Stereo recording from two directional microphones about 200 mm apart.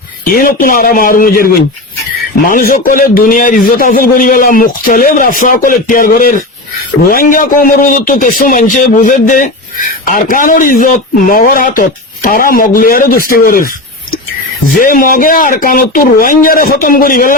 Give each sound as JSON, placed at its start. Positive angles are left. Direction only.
{"t": 0.3, "sound": "a man's voice", "side_deg": 45}